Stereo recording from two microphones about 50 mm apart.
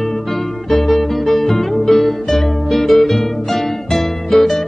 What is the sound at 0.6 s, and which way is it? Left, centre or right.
Music, centre.